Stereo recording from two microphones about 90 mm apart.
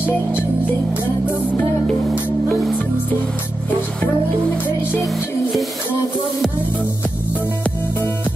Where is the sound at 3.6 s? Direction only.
15° left (ahead or behind).